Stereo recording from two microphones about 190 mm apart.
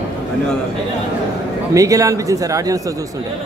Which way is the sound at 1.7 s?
15° right (ahead or behind).